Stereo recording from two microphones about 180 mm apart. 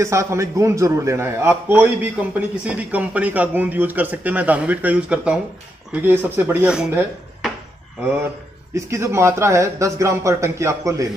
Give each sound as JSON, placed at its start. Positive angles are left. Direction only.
{"t": 0.0, "sound": "a man's voice", "side_deg": -15}
{"t": 8.7, "sound": "a man's voice", "side_deg": -15}